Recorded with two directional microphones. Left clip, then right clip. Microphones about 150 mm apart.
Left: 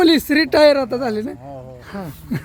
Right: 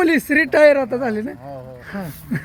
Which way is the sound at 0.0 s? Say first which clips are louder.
Left 2 dB; 10° left (ahead or behind).